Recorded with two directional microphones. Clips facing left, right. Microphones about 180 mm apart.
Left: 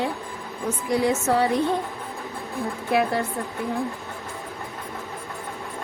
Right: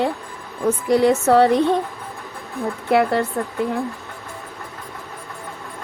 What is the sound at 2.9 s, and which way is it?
Speech, 65° right (ahead or behind).